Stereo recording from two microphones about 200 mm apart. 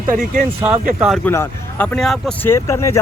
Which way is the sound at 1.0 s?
Centre (ahead or behind).